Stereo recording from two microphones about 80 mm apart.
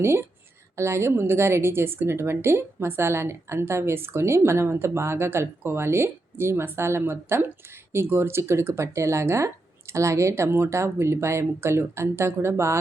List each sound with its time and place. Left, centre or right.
0.0 s a woman's voice: right